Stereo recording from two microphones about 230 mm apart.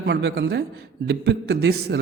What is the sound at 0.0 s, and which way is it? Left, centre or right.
A man's voice, right.